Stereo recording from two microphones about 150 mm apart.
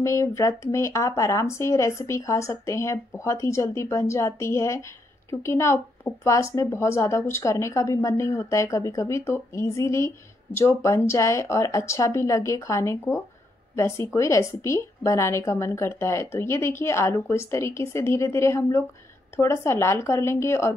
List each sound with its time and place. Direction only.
0.0 s a woman's voice: 20° left (ahead or behind)